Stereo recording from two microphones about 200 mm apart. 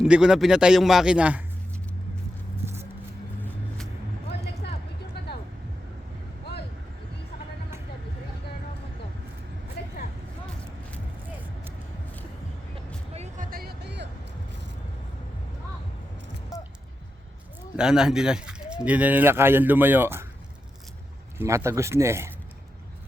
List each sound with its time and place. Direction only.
0.0 s a man's voice: 5° right (ahead or behind)
5.2 s vehicle: 55° left (ahead or behind)
9.8 s vehicle: 55° left (ahead or behind)
13.1 s music: 40° right (ahead or behind); by 14.1 s 55° right (ahead or behind)
17.7 s speech: 5° right (ahead or behind)
21.3 s speech: 15° right (ahead or behind)